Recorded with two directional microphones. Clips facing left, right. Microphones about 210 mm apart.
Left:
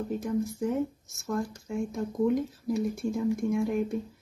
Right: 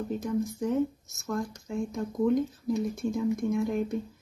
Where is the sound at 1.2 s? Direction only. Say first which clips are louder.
Left 1 dB; 5° left (ahead or behind).